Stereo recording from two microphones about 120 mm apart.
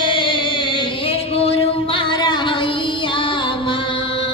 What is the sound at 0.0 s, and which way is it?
Music, 45° left (ahead or behind).